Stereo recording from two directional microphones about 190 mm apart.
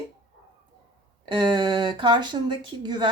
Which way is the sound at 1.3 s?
25° right (ahead or behind).